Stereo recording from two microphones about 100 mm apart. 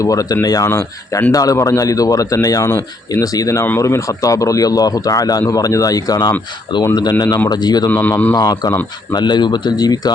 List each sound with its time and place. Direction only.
0.0 s speech: 35° left (ahead or behind)
0.7 s speech: 30° left (ahead or behind); by 7.9 s 45° left (ahead or behind)
7.9 s speech: 20° left (ahead or behind)
8.4 s speech: 40° left (ahead or behind)